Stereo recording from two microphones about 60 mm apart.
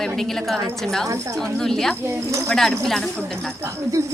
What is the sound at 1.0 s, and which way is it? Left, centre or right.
Speech, right.